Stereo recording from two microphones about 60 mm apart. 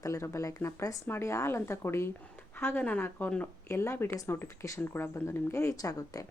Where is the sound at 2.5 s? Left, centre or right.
Left.